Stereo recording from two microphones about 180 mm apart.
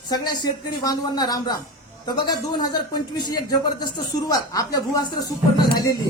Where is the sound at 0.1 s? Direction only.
25° left (ahead or behind).